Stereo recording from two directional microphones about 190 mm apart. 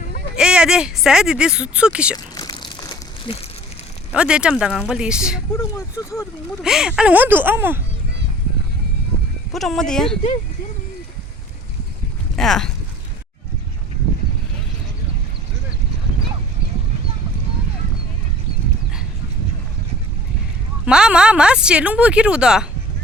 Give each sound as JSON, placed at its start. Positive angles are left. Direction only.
{"t": 0.3, "sound": "speech", "side_deg": -5}
{"t": 2.1, "sound": "crumpling", "side_deg": 20}
{"t": 4.1, "sound": "speech", "side_deg": -5}
{"t": 5.5, "sound": "speech", "side_deg": 15}
{"t": 6.6, "sound": "speech", "side_deg": -5}
{"t": 9.5, "sound": "speech", "side_deg": 0}
{"t": 12.4, "sound": "speech", "side_deg": 0}
{"t": 20.8, "sound": "speech", "side_deg": -5}